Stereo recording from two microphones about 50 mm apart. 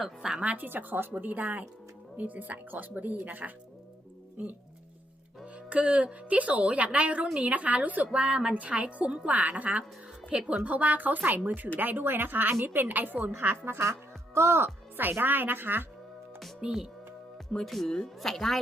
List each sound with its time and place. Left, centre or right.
0.0 s speech: centre
0.5 s speech: right
5.5 s a woman's voice: right
10.2 s speech: centre; by 13.3 s right
13.7 s a woman's voice: right
16.6 s a woman's voice: right
17.5 s speech: centre